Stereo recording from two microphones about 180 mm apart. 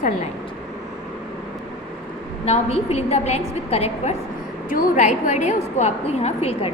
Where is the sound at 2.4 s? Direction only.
35° left (ahead or behind).